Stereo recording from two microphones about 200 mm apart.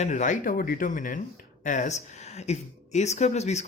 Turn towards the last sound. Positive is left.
turn(degrees=35)  # may be behind; listen again after turning